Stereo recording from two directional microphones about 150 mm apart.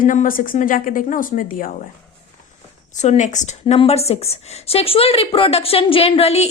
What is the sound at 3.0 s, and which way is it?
A woman's voice, 50° left (ahead or behind).